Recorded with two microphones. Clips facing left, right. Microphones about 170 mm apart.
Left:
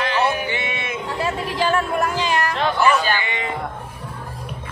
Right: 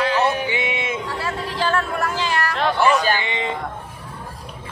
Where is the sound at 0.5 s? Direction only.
15° right (ahead or behind).